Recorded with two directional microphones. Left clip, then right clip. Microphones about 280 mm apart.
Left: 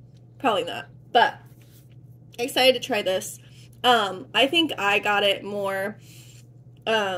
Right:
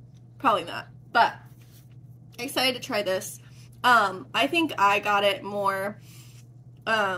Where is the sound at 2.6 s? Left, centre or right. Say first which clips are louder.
Left 6 dB; left.